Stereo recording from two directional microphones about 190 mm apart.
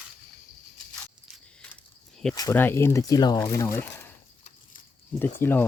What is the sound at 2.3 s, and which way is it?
Speech, 15° left (ahead or behind).